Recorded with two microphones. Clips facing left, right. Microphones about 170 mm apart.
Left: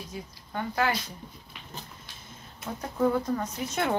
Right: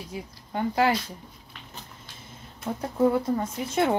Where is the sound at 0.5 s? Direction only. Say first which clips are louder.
Right 5 dB; 30° right (ahead or behind).